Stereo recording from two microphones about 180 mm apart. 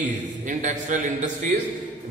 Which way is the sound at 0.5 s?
45° right (ahead or behind).